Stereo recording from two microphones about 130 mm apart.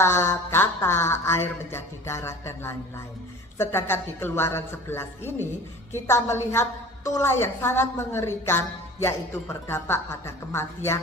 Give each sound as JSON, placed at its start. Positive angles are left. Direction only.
{"t": 0.0, "sound": "a woman's voice", "side_deg": 20}